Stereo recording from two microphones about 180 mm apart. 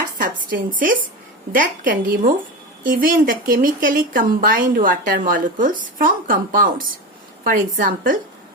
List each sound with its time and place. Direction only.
0.0 s speech: 50° right (ahead or behind)